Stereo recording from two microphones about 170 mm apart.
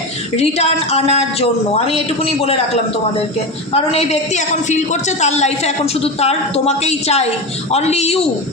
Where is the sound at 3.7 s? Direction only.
35° left (ahead or behind).